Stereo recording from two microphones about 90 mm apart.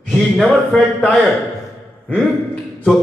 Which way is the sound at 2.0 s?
10° left (ahead or behind).